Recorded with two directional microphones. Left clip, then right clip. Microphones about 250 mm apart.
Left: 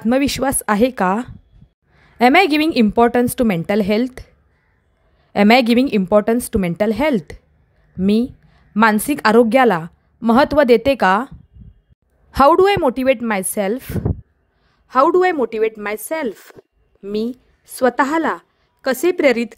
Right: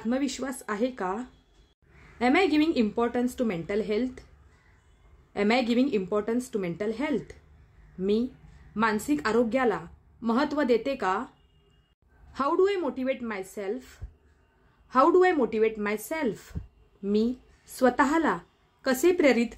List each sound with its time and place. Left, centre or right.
0.0 s a woman's voice: left
5.3 s a woman's voice: left
12.3 s a woman's voice: left